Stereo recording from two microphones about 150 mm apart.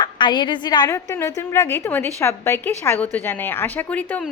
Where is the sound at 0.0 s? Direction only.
30° left (ahead or behind).